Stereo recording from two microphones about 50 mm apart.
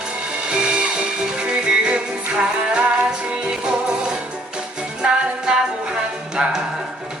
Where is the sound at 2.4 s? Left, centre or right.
Centre.